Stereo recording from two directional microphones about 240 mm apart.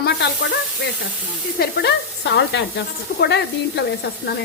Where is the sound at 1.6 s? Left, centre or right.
Left.